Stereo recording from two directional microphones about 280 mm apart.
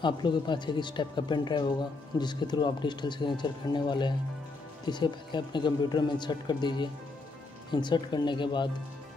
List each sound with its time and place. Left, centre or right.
0.0 s speech: centre